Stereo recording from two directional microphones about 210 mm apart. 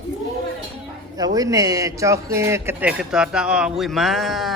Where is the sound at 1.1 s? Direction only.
15° right (ahead or behind); by 4.5 s centre (ahead or behind).